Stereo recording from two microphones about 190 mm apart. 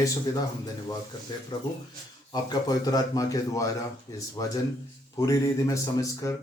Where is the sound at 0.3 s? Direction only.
20° left (ahead or behind).